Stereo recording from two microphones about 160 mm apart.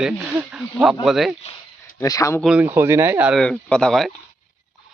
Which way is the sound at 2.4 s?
5° right (ahead or behind).